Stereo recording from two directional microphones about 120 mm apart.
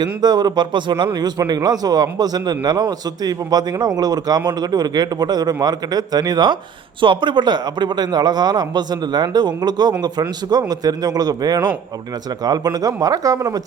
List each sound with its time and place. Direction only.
0.0 s a man's voice: 35° right (ahead or behind)